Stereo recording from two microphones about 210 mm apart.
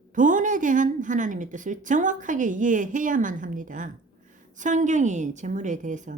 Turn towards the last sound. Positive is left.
turn(degrees=-35)  # may be behind; listen again after turning